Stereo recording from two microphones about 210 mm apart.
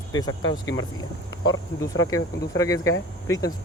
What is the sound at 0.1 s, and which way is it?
Speech, 20° left (ahead or behind).